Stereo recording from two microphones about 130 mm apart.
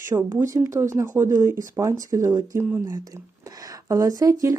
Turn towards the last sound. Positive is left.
turn(degrees=-25)  # may be behind; listen again after turning